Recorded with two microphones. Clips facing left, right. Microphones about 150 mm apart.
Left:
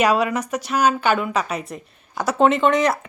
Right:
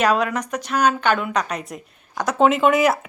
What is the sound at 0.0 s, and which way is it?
A woman's voice, 10° left (ahead or behind).